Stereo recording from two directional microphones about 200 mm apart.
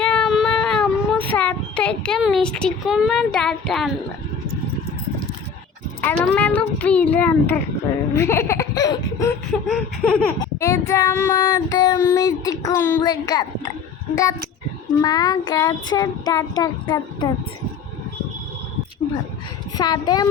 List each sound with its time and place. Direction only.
0.0 s child singing: 5° left (ahead or behind)
6.1 s child singing: 5° left (ahead or behind)
9.5 s laughter: 5° left (ahead or behind)
10.4 s child singing: 15° left (ahead or behind)
15.0 s child singing: 20° left (ahead or behind)
19.7 s child singing: 20° left (ahead or behind)